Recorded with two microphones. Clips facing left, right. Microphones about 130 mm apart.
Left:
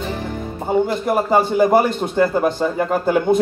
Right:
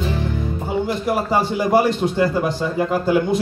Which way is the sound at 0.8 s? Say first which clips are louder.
Left 2 dB; 50° left (ahead or behind).